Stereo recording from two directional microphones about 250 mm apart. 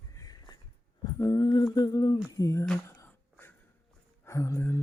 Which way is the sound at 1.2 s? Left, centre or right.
Centre.